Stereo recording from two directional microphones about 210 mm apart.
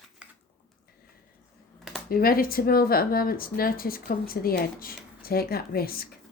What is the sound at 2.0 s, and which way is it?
Speech, 45° left (ahead or behind).